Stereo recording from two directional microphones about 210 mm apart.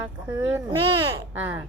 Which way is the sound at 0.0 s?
10° right (ahead or behind).